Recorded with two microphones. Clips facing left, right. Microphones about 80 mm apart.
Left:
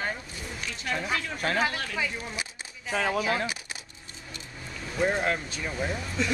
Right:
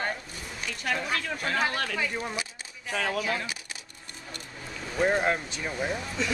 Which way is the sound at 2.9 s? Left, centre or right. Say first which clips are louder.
Left 2 dB; centre.